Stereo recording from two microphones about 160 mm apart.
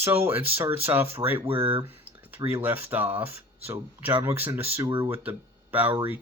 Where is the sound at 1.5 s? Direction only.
35° right (ahead or behind).